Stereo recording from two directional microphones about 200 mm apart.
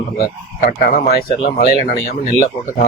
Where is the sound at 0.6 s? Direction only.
45° left (ahead or behind).